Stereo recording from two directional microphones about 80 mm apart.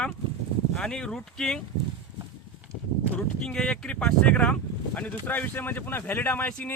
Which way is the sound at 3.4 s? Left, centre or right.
Centre.